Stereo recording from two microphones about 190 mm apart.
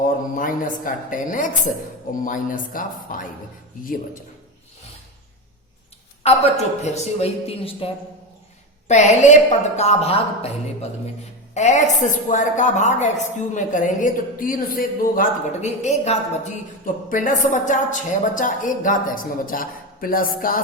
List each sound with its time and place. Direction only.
0.0 s a woman's voice: 45° left (ahead or behind)
6.2 s a woman's voice: 35° left (ahead or behind)
8.9 s a woman's voice: 40° left (ahead or behind)